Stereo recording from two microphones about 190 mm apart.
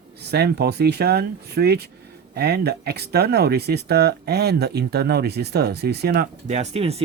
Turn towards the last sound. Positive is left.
turn(degrees=-35)  # may be behind; listen again after turning